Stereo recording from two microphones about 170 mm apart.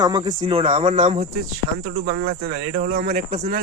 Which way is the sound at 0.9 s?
45° right (ahead or behind).